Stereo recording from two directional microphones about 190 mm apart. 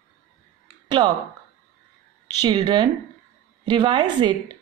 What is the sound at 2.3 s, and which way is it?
A woman's voice, 20° right (ahead or behind).